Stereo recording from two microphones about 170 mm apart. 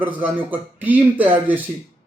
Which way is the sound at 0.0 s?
10° right (ahead or behind).